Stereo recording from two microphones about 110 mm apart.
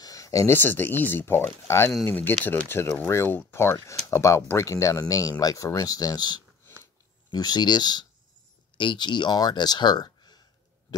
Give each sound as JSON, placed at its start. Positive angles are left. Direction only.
{"t": 0.0, "sound": "speech", "side_deg": 30}